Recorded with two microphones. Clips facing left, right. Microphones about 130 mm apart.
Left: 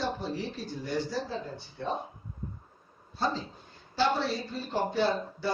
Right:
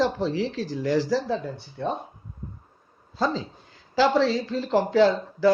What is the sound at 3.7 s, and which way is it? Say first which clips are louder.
Speech: right 6 dB; 90° right.